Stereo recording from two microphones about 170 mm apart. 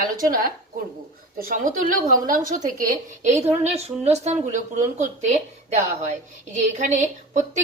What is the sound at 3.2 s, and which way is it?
A woman's voice, 40° right (ahead or behind).